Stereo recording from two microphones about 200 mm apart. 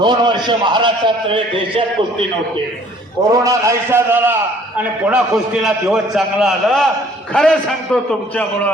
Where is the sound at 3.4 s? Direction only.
15° right (ahead or behind).